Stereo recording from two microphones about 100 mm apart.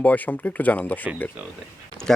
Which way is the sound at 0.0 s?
15° left (ahead or behind).